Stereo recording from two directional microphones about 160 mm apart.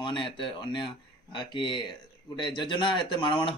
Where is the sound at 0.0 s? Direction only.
30° left (ahead or behind).